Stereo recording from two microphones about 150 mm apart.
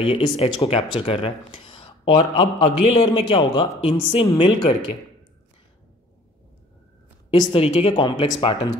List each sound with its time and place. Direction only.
0.0 s speech: 40° left (ahead or behind)
7.3 s speech: 40° left (ahead or behind)